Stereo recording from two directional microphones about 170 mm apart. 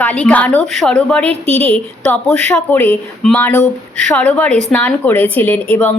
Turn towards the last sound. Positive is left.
turn(degrees=10)  # may be behind; listen again after turning